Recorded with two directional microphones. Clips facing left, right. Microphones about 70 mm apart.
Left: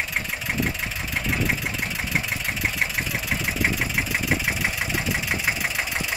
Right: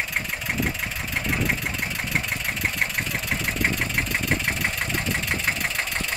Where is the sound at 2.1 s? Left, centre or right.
Centre.